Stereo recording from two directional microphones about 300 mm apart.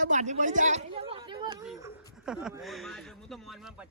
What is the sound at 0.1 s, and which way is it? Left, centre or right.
Speech, right.